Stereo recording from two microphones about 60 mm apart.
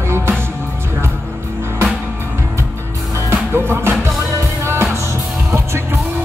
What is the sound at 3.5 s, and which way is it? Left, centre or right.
Music, right.